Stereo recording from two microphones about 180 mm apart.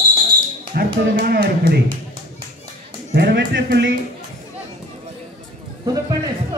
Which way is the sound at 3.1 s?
70° right (ahead or behind).